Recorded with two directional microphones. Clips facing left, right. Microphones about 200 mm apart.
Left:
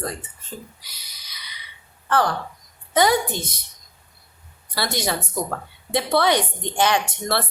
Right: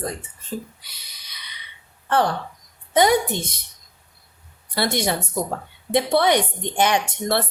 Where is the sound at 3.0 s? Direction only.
20° right (ahead or behind).